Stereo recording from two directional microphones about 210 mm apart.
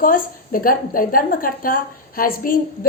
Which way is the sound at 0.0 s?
40° left (ahead or behind).